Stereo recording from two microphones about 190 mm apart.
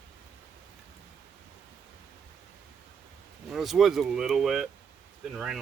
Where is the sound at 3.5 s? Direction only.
Centre (ahead or behind).